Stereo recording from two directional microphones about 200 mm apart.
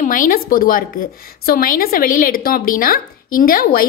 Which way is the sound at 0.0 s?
40° left (ahead or behind).